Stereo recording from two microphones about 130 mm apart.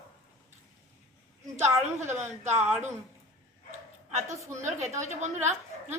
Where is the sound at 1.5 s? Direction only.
60° right (ahead or behind).